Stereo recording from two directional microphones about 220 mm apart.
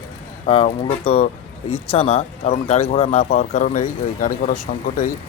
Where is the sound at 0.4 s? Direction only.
25° left (ahead or behind).